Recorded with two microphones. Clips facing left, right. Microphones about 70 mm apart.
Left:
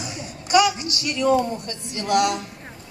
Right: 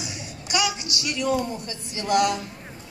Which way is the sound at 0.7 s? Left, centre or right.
Left.